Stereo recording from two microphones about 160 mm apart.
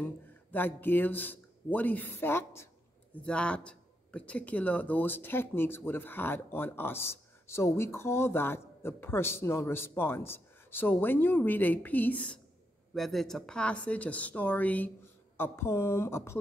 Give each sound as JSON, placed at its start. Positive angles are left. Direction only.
{"t": 0.5, "sound": "speech", "side_deg": 10}